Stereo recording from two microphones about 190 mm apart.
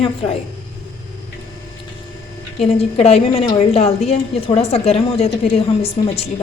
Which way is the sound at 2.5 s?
35° left (ahead or behind).